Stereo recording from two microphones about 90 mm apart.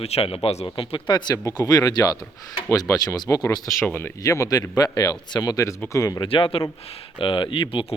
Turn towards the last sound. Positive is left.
turn(degrees=70)  # may be behind; listen again after turning